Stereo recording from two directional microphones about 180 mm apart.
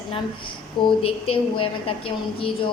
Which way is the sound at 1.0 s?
30° left (ahead or behind).